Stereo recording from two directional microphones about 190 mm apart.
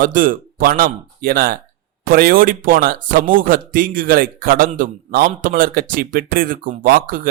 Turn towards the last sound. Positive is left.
turn(degrees=-45)  # may be behind; listen again after turning